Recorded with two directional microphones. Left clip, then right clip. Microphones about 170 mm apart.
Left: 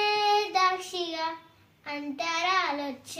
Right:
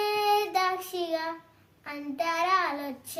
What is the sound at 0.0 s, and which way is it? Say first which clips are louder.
Child singing: left 1 dB; 20° right (ahead or behind).